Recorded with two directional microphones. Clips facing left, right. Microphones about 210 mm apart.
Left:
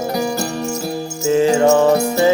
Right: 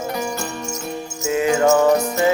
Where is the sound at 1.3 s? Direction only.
30° left (ahead or behind).